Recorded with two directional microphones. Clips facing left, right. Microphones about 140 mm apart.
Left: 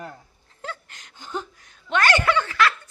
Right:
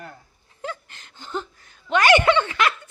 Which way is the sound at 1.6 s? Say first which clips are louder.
Right 3 dB; centre (ahead or behind).